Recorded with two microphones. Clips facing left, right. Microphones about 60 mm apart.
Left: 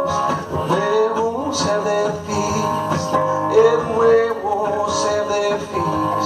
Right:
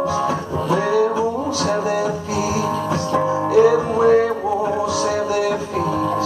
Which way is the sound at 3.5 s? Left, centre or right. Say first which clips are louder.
Even; left.